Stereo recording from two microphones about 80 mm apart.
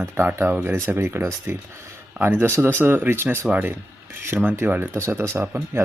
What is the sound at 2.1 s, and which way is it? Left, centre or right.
Speech, right.